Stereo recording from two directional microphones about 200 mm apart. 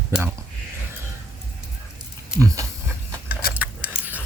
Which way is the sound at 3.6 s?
5° right (ahead or behind).